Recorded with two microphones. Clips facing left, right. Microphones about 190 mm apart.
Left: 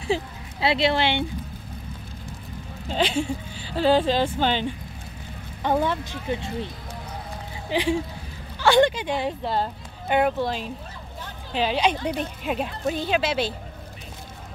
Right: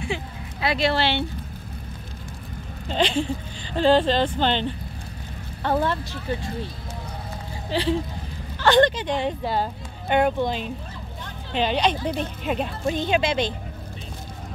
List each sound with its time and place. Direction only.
0.0 s speech: 30° left (ahead or behind)
2.9 s a woman's voice: 5° left (ahead or behind)
7.7 s a woman's voice: 15° left (ahead or behind)